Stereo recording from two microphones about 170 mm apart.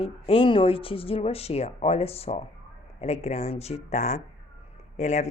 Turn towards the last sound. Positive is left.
turn(degrees=40)  # may be behind; listen again after turning